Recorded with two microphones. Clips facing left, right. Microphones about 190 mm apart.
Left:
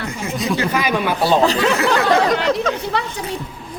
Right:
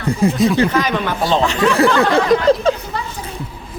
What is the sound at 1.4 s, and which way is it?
Speech, 35° left (ahead or behind).